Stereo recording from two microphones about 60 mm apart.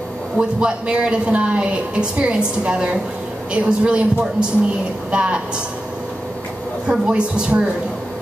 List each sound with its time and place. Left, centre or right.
0.4 s a woman's voice: centre
6.9 s a woman's voice: centre